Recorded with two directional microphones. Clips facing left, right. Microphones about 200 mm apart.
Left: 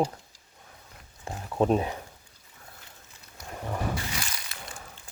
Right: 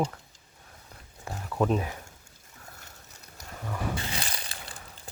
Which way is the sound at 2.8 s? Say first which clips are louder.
Right 1 dB; 45° right (ahead or behind).